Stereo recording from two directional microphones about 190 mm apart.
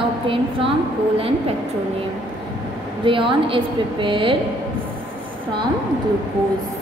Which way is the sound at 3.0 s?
25° right (ahead or behind).